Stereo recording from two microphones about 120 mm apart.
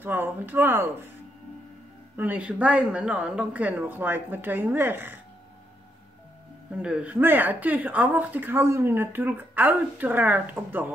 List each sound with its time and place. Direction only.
0.0 s speech: 15° right (ahead or behind)
2.1 s speech: 15° right (ahead or behind)
6.8 s speech: 10° right (ahead or behind)